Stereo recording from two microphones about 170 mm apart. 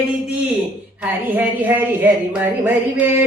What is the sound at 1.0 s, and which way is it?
A woman's voice, 10° right (ahead or behind).